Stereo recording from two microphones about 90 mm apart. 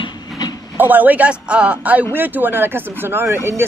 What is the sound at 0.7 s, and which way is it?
A man's voice, 20° right (ahead or behind).